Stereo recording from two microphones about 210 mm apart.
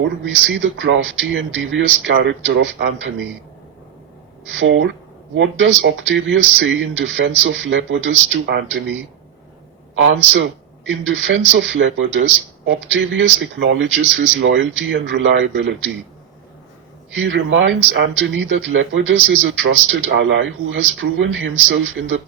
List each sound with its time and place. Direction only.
0.0 s a man's voice: 60° right (ahead or behind)
4.6 s a man's voice: 65° right (ahead or behind)
17.2 s a man's voice: 65° right (ahead or behind)